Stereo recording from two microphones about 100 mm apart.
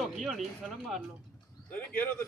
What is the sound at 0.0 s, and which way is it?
Speech, centre (ahead or behind).